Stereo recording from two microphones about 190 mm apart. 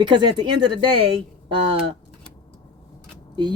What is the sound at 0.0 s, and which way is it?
Speech, 25° right (ahead or behind).